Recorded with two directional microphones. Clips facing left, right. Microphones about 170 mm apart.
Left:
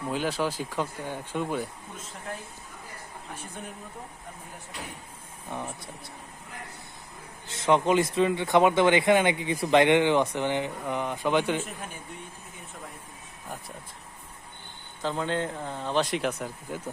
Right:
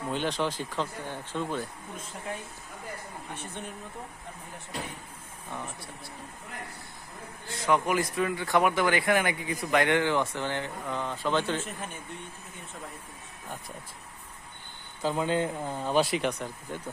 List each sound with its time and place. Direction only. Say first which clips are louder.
0.1 s speech: left 1 dB; 5° left (ahead or behind)
5.5 s speech: left 3 dB; 20° left (ahead or behind)
7.4 s speech: left 3 dB; 25° left (ahead or behind)
15.0 s speech: right 2 dB; 10° right (ahead or behind); by 16.9 s 5° left (ahead or behind)